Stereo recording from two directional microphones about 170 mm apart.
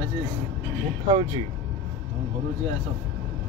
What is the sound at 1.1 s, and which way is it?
Speech, 25° right (ahead or behind).